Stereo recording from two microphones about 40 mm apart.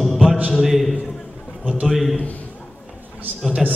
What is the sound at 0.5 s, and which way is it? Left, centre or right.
A man's voice, centre.